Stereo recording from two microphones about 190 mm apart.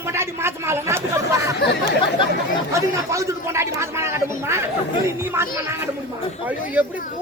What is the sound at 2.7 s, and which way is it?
Speech, 15° right (ahead or behind).